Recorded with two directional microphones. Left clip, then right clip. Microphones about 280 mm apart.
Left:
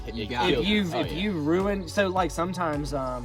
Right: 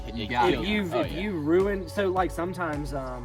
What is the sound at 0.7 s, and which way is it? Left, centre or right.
Speech, left.